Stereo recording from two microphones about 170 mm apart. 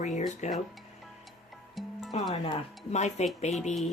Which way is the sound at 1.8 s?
Centre (ahead or behind).